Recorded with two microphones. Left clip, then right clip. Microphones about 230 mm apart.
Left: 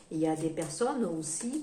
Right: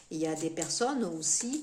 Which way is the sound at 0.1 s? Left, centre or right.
Right.